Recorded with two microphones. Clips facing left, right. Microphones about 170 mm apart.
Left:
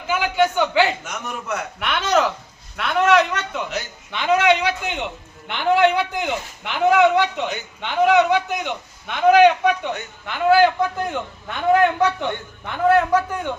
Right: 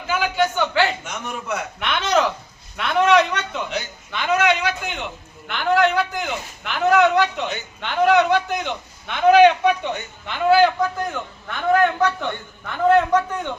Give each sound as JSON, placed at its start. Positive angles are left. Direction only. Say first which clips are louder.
{"t": 0.1, "sound": "a man's voice", "louder": "left 2 dB", "side_deg": 15}
{"t": 1.0, "sound": "a man's voice", "louder": "even", "side_deg": 0}
{"t": 4.1, "sound": "a man's voice", "louder": "left 2 dB", "side_deg": 20}
{"t": 5.5, "sound": "a man's voice", "louder": "left 1 dB", "side_deg": 25}